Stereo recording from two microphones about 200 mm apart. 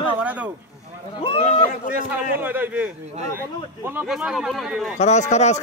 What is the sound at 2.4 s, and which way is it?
A man's voice, 10° right (ahead or behind).